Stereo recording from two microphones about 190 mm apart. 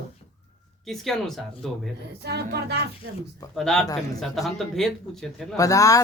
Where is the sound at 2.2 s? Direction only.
60° right (ahead or behind).